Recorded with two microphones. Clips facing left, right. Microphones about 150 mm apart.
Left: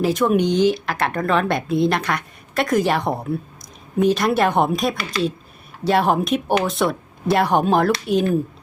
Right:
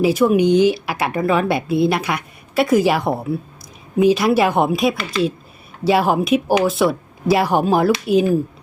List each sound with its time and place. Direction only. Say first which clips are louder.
0.0 s speech: right 3 dB; 5° right (ahead or behind)